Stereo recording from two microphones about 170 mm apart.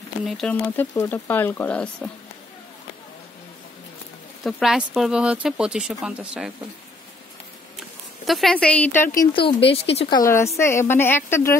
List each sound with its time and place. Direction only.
0.2 s a woman's voice: centre (ahead or behind)
4.4 s speech: centre (ahead or behind)
8.3 s speech: centre (ahead or behind)
9.2 s a woman's voice: 30° left (ahead or behind)